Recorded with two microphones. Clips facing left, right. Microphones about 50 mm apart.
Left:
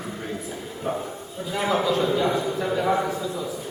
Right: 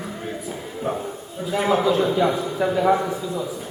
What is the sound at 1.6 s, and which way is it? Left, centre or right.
Speech, centre.